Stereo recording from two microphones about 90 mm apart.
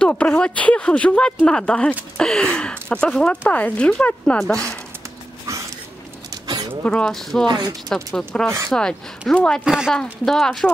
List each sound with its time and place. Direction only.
0.0 s speech: 15° left (ahead or behind)
5.5 s a sound: 35° right (ahead or behind)
6.8 s speech: 10° left (ahead or behind)
7.4 s speech: 50° right (ahead or behind)
7.9 s speech: 5° left (ahead or behind)
8.5 s speech: 30° right (ahead or behind)
9.3 s speech: 10° left (ahead or behind)
9.7 s speech: 5° right (ahead or behind)